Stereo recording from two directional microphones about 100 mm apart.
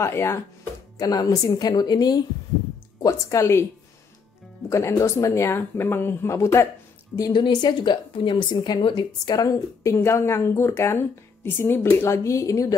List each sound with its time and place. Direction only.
0.0 s a woman's voice: 25° left (ahead or behind)
0.9 s a woman's voice: 40° left (ahead or behind)
3.0 s a woman's voice: 30° left (ahead or behind)
4.6 s a woman's voice: 30° left (ahead or behind)
7.2 s a woman's voice: 45° left (ahead or behind)
9.9 s a woman's voice: 25° left (ahead or behind)